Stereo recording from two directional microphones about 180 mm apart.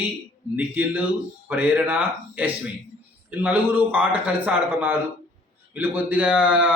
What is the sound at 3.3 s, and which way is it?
A man's voice, 10° right (ahead or behind).